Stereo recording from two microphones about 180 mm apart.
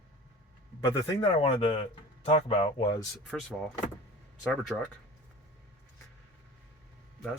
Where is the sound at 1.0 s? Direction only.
30° left (ahead or behind).